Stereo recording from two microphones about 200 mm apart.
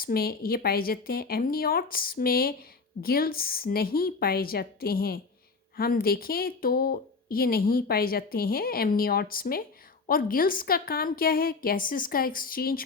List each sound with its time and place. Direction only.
0.0 s a woman's voice: 50° left (ahead or behind)